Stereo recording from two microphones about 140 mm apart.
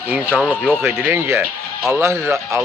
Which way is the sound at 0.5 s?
15° right (ahead or behind).